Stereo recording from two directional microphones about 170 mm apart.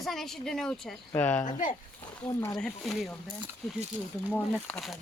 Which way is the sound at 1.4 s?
50° left (ahead or behind).